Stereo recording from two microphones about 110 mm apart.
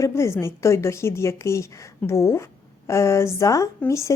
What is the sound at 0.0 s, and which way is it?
A woman's voice, 25° left (ahead or behind).